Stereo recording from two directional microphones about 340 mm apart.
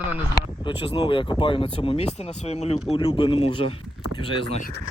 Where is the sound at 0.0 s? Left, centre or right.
Centre.